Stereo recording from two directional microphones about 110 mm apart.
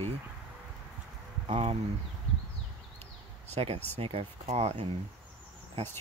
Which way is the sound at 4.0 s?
60° right (ahead or behind).